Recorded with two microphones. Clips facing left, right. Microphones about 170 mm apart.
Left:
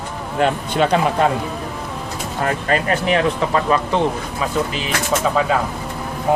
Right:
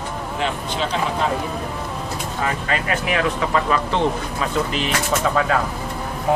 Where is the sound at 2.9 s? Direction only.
35° left (ahead or behind).